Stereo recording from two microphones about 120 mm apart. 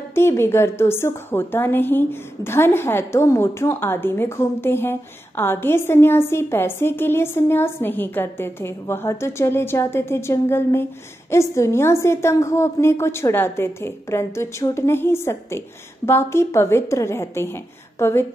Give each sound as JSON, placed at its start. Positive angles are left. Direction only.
{"t": 0.1, "sound": "a woman's voice", "side_deg": 20}